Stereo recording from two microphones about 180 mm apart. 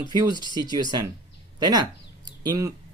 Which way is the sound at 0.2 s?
25° right (ahead or behind).